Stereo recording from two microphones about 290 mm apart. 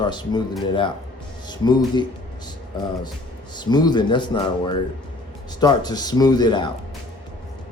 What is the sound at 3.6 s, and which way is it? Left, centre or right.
Speech, centre.